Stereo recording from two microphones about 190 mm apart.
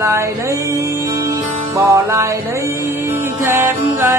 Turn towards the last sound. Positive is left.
turn(degrees=-10)  # may be behind; listen again after turning